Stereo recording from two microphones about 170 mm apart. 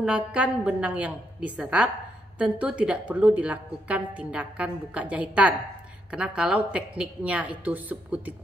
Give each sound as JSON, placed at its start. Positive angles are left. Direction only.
{"t": 0.0, "sound": "a woman's voice", "side_deg": -5}